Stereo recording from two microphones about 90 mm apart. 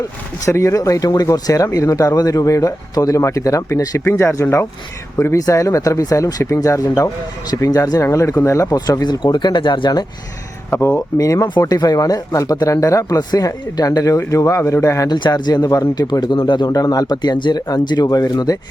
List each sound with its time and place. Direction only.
0.4 s speech: 35° left (ahead or behind)
4.0 s speech: 25° left (ahead or behind); by 8.0 s 45° left (ahead or behind)
8.0 s speech: 35° left (ahead or behind); by 10.1 s 55° left (ahead or behind)
10.8 s speech: 40° left (ahead or behind)
15.1 s speech: 50° left (ahead or behind)